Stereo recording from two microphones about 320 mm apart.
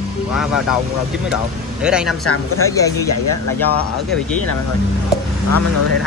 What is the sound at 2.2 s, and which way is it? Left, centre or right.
Speech, left.